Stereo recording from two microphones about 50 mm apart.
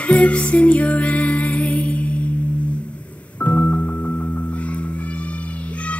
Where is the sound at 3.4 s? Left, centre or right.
Left.